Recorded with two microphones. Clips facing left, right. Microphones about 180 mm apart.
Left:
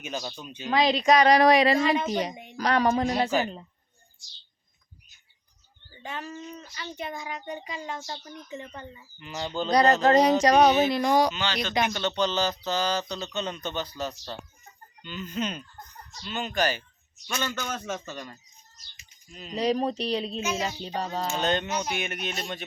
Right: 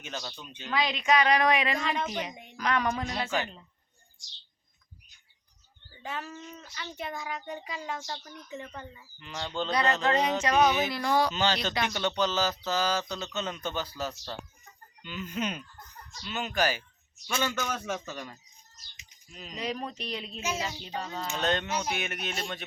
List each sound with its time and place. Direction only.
0.0 s speech: 10° left (ahead or behind)
0.7 s a sound: 35° left (ahead or behind)
2.3 s speech: centre (ahead or behind)
2.6 s a sound: 35° left (ahead or behind)
6.0 s speech: centre (ahead or behind)
9.6 s a sound: 40° left (ahead or behind)
10.8 s speech: 20° left (ahead or behind)
11.3 s speech: 40° right (ahead or behind)
11.7 s a man's voice: 20° left (ahead or behind)
11.9 s a man's voice: 10° right (ahead or behind)
19.5 s a sound: 35° left (ahead or behind)
21.4 s speech: centre (ahead or behind)